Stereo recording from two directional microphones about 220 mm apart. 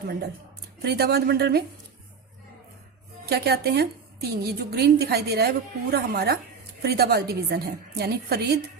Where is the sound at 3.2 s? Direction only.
45° right (ahead or behind).